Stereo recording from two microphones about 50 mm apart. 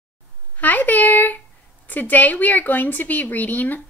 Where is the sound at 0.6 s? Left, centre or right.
Left.